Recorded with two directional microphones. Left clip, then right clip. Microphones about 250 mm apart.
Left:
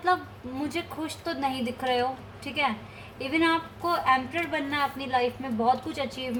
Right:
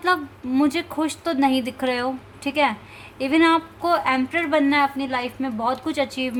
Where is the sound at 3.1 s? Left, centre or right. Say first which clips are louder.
Right 7 dB; right.